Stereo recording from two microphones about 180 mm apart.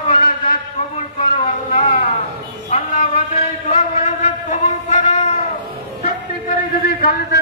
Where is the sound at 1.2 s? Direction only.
30° left (ahead or behind).